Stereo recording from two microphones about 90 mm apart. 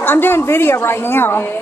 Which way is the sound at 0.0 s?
25° left (ahead or behind).